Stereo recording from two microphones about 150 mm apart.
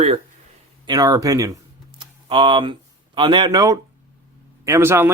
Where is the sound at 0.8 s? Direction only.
25° right (ahead or behind).